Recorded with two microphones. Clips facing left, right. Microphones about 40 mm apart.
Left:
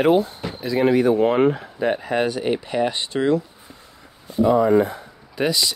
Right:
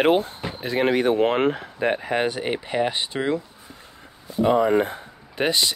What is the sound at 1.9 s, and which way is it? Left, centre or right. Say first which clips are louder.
Speech: left 2 dB; right.